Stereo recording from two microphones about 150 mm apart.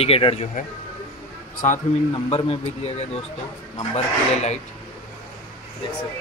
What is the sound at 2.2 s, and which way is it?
Speech, 40° left (ahead or behind).